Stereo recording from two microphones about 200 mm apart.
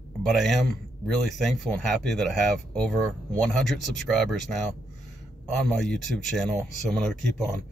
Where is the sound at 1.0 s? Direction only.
Centre (ahead or behind).